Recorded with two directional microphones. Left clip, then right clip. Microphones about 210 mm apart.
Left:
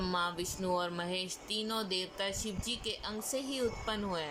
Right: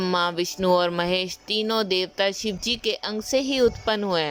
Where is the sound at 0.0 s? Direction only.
40° right (ahead or behind).